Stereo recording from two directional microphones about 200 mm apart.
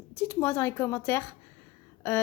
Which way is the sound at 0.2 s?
10° left (ahead or behind).